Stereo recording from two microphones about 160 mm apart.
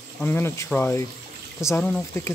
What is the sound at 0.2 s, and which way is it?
Speech, 15° left (ahead or behind).